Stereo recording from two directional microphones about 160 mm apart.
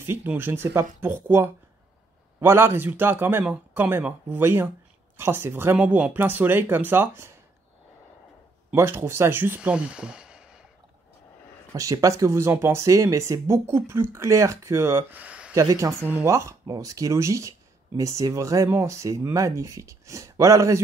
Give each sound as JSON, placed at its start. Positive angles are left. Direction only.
{"t": 0.0, "sound": "speech", "side_deg": -15}
{"t": 8.7, "sound": "speech", "side_deg": -15}
{"t": 11.7, "sound": "speech", "side_deg": -20}
{"t": 15.5, "sound": "speech", "side_deg": -20}